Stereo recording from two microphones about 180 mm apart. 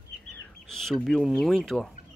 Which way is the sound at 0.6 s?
5° left (ahead or behind).